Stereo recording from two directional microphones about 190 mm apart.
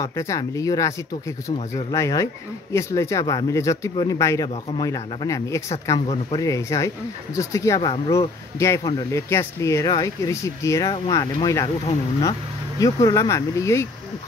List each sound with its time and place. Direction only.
0.0 s speech: 15° left (ahead or behind)